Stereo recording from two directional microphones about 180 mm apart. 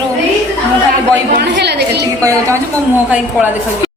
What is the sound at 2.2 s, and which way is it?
Speech, 15° right (ahead or behind).